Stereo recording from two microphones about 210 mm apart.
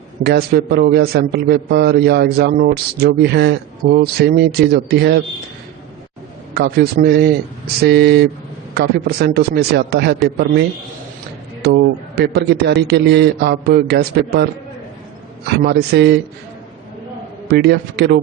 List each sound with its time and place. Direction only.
0.2 s a man's voice: 50° right (ahead or behind)
6.5 s a man's voice: 50° right (ahead or behind)
11.6 s a man's voice: 50° right (ahead or behind)
15.6 s a man's voice: 50° right (ahead or behind)
17.5 s a man's voice: 50° right (ahead or behind)